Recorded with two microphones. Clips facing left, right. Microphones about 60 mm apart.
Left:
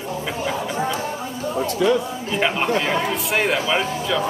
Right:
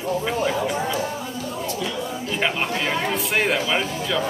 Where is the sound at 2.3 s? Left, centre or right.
Centre.